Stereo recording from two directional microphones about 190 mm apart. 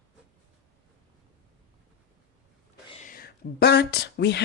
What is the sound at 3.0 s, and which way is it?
Speech, 50° left (ahead or behind).